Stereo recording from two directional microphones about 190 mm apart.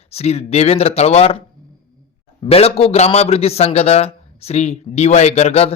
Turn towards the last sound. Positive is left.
turn(degrees=35)  # may be behind; listen again after turning